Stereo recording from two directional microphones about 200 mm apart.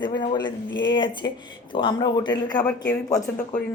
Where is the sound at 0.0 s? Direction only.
20° left (ahead or behind).